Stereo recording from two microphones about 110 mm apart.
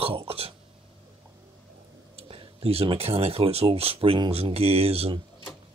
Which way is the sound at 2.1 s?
60° right (ahead or behind).